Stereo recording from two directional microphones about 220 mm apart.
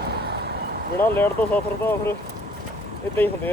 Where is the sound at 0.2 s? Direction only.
50° right (ahead or behind).